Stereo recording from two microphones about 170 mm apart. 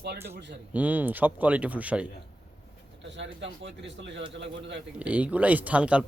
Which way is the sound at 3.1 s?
90° right.